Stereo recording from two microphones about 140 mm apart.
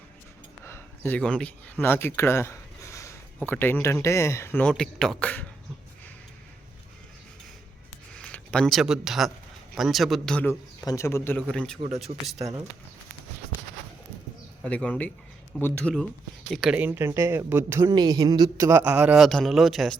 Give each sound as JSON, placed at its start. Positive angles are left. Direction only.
{"t": 0.6, "sound": "speech", "side_deg": 15}
{"t": 4.6, "sound": "a man's voice", "side_deg": 5}
{"t": 8.1, "sound": "a man's voice", "side_deg": 5}
{"t": 10.8, "sound": "a man's voice", "side_deg": 20}
{"t": 11.5, "sound": "a man's voice", "side_deg": 5}
{"t": 14.6, "sound": "a man's voice", "side_deg": 10}
{"t": 17.9, "sound": "speech", "side_deg": -30}
{"t": 18.8, "sound": "a man's voice", "side_deg": -10}